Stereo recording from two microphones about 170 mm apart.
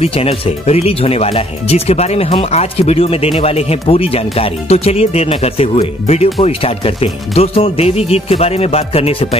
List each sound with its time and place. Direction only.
0.0 s speech: 35° left (ahead or behind)